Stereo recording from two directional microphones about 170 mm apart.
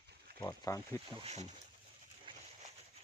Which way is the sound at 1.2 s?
40° right (ahead or behind).